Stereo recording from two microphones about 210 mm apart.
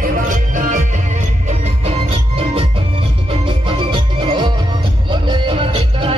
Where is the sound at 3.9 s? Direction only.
25° right (ahead or behind).